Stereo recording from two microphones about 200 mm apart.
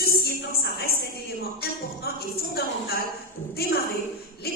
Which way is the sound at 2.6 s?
50° left (ahead or behind).